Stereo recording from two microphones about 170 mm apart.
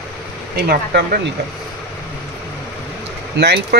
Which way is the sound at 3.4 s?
80° right.